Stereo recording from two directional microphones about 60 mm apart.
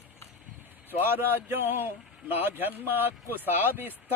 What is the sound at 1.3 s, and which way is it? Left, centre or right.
Speech, right.